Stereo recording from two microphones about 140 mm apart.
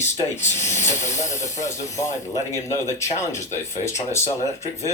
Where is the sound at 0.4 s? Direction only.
55° left (ahead or behind).